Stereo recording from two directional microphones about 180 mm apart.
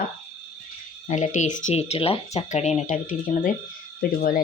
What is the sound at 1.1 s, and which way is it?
Speech, 45° left (ahead or behind).